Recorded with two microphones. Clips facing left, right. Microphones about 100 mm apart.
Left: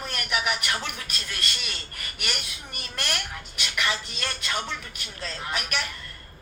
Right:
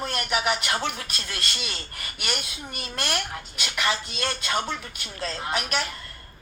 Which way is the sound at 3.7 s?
30° right (ahead or behind).